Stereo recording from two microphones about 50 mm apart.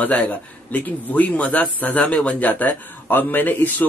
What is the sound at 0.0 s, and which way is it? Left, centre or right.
Speech, left.